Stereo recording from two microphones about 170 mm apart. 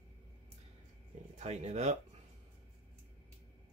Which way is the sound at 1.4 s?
40° right (ahead or behind).